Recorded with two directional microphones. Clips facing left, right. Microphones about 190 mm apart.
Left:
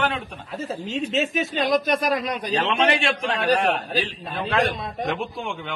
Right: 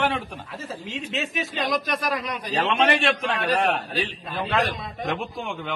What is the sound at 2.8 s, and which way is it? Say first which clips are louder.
A man's voice: even; centre (ahead or behind).